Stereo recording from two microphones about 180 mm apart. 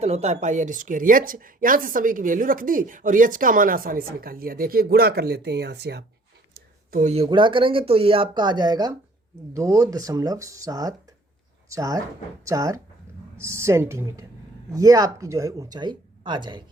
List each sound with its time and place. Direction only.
0.0 s a woman's voice: 35° right (ahead or behind); by 6.1 s 65° right (ahead or behind)
6.9 s speech: 40° right (ahead or behind); by 12.8 s 20° right (ahead or behind)
13.1 s a sound: 15° right (ahead or behind)
13.4 s speech: 15° right (ahead or behind)